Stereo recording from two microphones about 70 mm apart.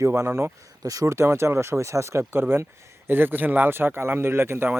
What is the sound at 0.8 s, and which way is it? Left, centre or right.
Speech, right.